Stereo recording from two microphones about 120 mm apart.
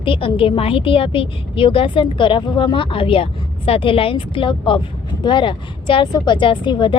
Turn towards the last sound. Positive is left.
turn(degrees=40)  # may be behind; listen again after turning